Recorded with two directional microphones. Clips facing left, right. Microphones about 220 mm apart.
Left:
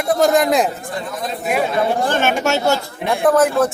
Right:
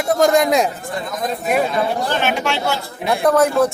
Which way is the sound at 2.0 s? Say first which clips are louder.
Left 2 dB; 50° left (ahead or behind).